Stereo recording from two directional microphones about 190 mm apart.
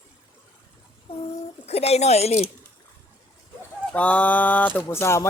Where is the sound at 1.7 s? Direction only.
35° left (ahead or behind).